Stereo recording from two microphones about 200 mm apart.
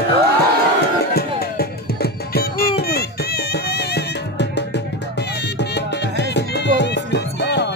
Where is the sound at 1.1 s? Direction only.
50° left (ahead or behind).